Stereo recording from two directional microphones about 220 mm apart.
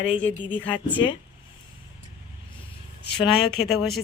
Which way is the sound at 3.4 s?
45° left (ahead or behind).